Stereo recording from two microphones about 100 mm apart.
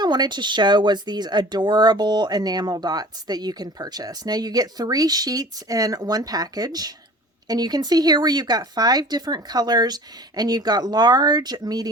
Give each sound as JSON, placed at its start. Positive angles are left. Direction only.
{"t": 0.0, "sound": "speech", "side_deg": -45}